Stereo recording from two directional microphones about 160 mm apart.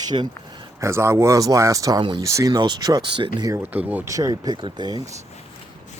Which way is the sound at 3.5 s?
10° right (ahead or behind).